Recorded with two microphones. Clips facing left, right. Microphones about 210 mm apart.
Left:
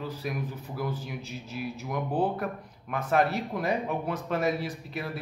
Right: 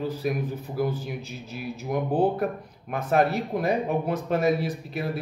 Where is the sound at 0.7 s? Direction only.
45° right (ahead or behind).